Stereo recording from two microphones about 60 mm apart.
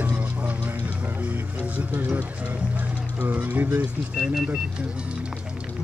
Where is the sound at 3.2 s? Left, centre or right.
Right.